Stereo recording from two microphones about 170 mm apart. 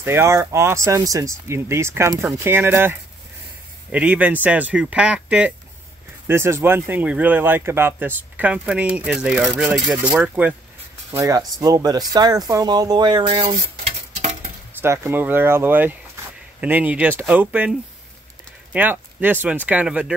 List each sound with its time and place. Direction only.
0.0 s speech: 15° right (ahead or behind); by 13.6 s 30° right (ahead or behind)
13.8 s a sound: 45° right (ahead or behind)
14.8 s speech: 15° right (ahead or behind)